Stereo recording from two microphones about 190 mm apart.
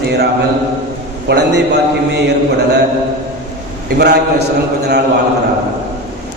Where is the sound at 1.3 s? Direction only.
60° right (ahead or behind).